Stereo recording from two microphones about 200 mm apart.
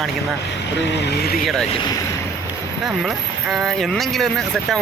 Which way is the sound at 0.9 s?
60° left (ahead or behind).